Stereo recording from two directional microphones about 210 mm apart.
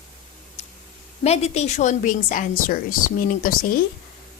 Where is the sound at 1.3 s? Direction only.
30° left (ahead or behind).